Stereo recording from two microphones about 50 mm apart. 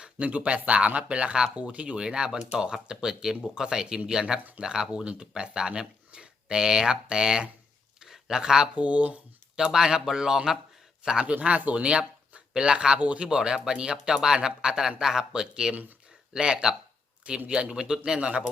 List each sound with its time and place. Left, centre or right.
0.0 s speech: right
7.9 s a sound: centre
8.7 s speech: right
9.7 s speech: centre
11.3 s speech: right